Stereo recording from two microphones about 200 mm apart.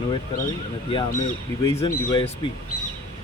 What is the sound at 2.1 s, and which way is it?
Speech, 25° left (ahead or behind).